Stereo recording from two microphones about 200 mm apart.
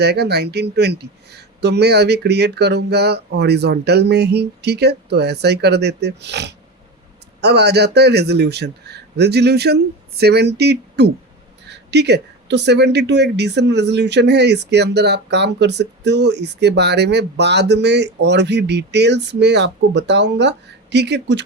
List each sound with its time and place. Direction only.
0.0 s speech: 55° right (ahead or behind)